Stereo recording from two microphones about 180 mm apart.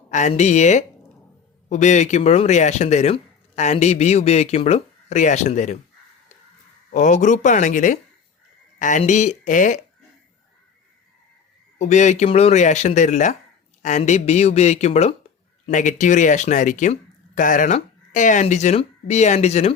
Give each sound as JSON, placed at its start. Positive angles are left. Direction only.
{"t": 0.1, "sound": "speech", "side_deg": 40}
{"t": 6.9, "sound": "speech", "side_deg": 45}
{"t": 11.8, "sound": "speech", "side_deg": 40}